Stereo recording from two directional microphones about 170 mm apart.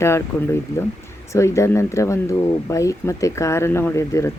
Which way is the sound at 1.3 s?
15° left (ahead or behind).